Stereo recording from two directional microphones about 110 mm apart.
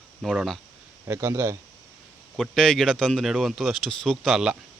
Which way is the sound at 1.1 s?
25° right (ahead or behind).